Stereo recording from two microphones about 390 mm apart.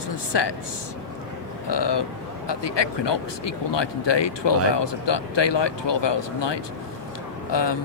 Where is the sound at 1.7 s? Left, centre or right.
Left.